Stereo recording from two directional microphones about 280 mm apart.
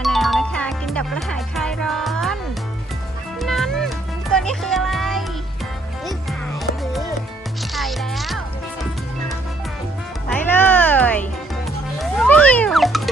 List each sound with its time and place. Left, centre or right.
0.0 s music: centre
7.7 s music: centre
10.2 s music: centre